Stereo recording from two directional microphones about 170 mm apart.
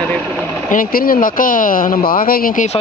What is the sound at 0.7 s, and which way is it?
Speech, 60° left (ahead or behind).